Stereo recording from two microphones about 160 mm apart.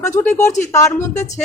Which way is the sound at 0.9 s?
50° left (ahead or behind).